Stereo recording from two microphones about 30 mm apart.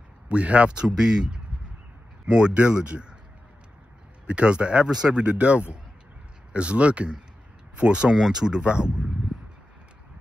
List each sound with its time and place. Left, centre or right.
0.3 s speech: right
0.7 s speech: right
4.3 s speech: right
8.1 s speech: right
8.6 s speech: right